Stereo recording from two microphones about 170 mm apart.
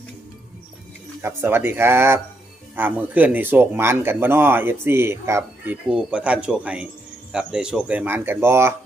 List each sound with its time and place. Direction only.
1.2 s speech: 15° right (ahead or behind)